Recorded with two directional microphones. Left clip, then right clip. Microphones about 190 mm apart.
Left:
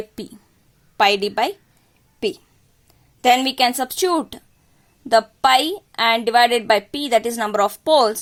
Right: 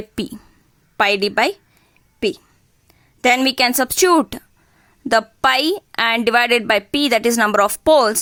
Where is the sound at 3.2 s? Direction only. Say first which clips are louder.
Right 1 dB; 25° right (ahead or behind).